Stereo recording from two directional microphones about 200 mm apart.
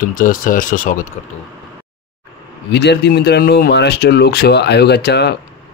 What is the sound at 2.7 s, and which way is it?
Speech, 55° left (ahead or behind).